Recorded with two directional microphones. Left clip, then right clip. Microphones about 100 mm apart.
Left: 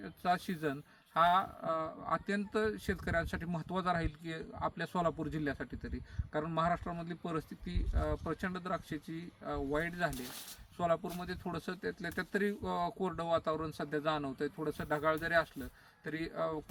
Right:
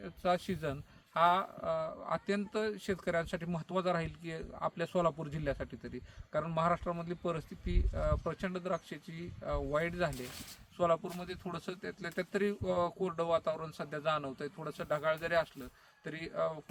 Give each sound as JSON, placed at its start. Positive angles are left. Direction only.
{"t": 0.0, "sound": "speech", "side_deg": -30}